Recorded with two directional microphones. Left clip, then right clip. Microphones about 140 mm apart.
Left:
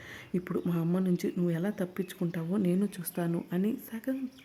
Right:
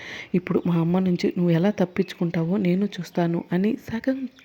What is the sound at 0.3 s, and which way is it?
Speech, 30° right (ahead or behind).